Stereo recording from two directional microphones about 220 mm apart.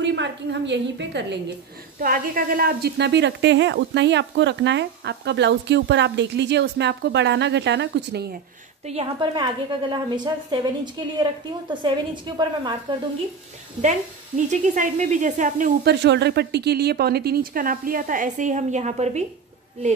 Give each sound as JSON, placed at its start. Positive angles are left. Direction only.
{"t": 0.0, "sound": "a woman's voice", "side_deg": -55}
{"t": 2.0, "sound": "a woman's voice", "side_deg": -40}
{"t": 8.8, "sound": "a woman's voice", "side_deg": -25}
{"t": 13.7, "sound": "speech", "side_deg": -35}